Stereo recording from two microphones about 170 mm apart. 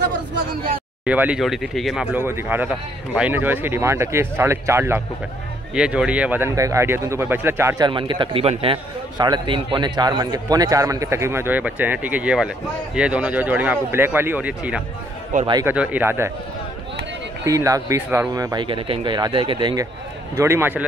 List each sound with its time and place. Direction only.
1.0 s speech: 10° right (ahead or behind)
2.1 s speech: 15° right (ahead or behind)
7.8 s a man's voice: 30° right (ahead or behind); by 16.3 s 10° right (ahead or behind)
17.5 s a man's voice: 20° right (ahead or behind)